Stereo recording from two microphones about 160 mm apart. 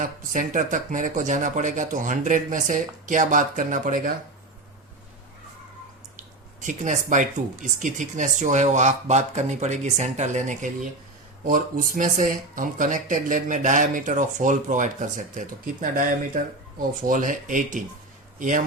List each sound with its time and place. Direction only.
0.0 s speech: 55° right (ahead or behind)
6.6 s a man's voice: 50° right (ahead or behind)